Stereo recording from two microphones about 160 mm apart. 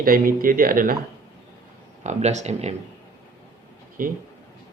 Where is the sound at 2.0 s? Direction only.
45° right (ahead or behind).